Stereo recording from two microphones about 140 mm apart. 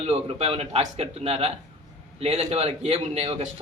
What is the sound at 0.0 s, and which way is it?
A man's voice, 50° right (ahead or behind).